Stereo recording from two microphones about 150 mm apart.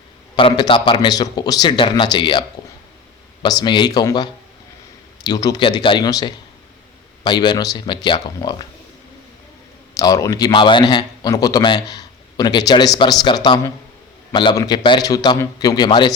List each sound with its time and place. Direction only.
0.3 s a man's voice: 35° left (ahead or behind)
3.4 s a man's voice: 30° left (ahead or behind)
9.9 s a man's voice: 25° left (ahead or behind)